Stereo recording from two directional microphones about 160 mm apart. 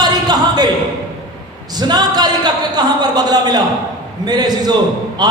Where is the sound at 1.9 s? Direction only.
25° right (ahead or behind).